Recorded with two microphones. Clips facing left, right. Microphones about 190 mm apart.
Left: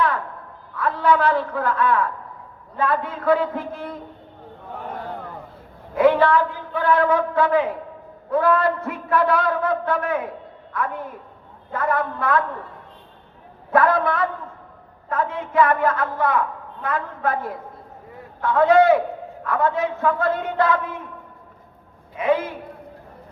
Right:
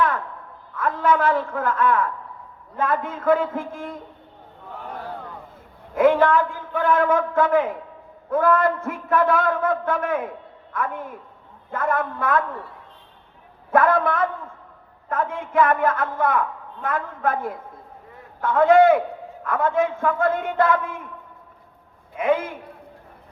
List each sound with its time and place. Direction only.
0.8 s a man's voice: 45° right (ahead or behind)
6.0 s a man's voice: 50° right (ahead or behind)
11.7 s a man's voice: 50° right (ahead or behind)
13.7 s a man's voice: 50° right (ahead or behind)
18.6 s a man's voice: 50° right (ahead or behind)
22.1 s a man's voice: 50° right (ahead or behind)